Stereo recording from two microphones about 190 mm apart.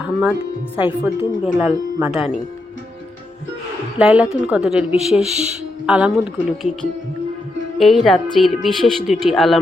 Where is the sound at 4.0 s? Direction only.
5° right (ahead or behind).